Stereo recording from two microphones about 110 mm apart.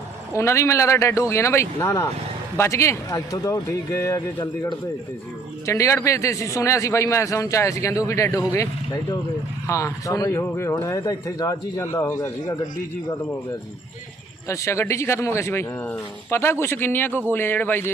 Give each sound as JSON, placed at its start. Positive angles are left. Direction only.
{"t": 0.4, "sound": "a man's voice", "side_deg": 25}
{"t": 5.7, "sound": "a man's voice", "side_deg": 25}
{"t": 10.4, "sound": "a man's voice", "side_deg": 20}
{"t": 14.5, "sound": "a man's voice", "side_deg": 25}